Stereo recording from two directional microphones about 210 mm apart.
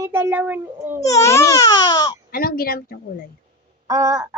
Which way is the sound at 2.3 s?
45° left (ahead or behind).